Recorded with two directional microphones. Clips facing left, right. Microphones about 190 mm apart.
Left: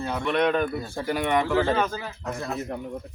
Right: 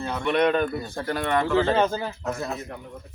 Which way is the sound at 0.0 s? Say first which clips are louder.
Right 1 dB; 5° left (ahead or behind).